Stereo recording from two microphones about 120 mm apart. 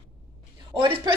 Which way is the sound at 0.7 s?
40° right (ahead or behind).